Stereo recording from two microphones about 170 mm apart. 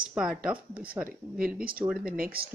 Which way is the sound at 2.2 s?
60° right (ahead or behind).